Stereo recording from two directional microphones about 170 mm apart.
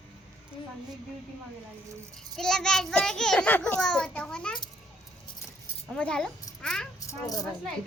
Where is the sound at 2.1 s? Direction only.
5° left (ahead or behind).